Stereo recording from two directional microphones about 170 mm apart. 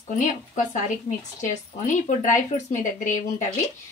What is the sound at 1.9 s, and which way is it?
Speech, 45° left (ahead or behind).